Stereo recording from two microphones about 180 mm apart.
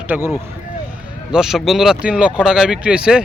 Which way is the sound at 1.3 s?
Centre (ahead or behind).